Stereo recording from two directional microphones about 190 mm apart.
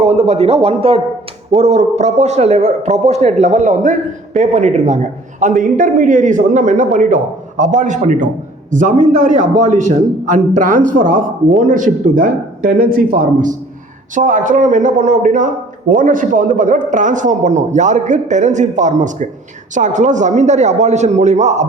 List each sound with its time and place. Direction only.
0.0 s a man's voice: 35° right (ahead or behind)